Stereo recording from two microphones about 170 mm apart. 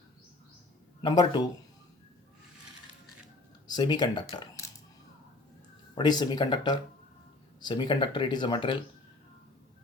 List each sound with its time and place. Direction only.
1.0 s speech: 25° left (ahead or behind)
3.7 s speech: 25° left (ahead or behind)
5.9 s speech: 25° left (ahead or behind)